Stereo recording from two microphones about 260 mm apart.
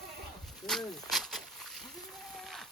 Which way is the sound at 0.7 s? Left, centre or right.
Centre.